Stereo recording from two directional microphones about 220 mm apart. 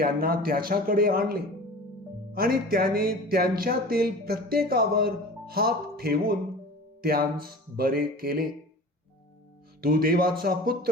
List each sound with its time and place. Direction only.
0.0 s speech: 40° right (ahead or behind)
9.8 s speech: 40° right (ahead or behind)